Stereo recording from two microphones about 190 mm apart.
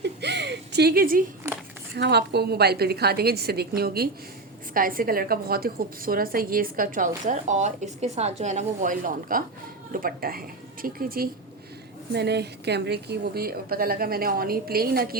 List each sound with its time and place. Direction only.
0.0 s a sound: 60° right (ahead or behind)
2.0 s a woman's voice: 60° right (ahead or behind)
12.1 s a woman's voice: 60° right (ahead or behind)